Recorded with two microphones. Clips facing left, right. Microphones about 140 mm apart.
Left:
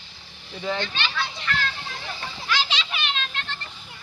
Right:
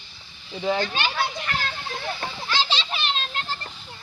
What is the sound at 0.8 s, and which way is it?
Children playing, 45° right (ahead or behind).